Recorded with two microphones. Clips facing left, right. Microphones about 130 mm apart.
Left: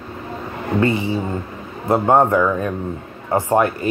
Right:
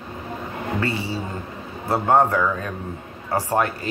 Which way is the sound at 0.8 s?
20° left (ahead or behind).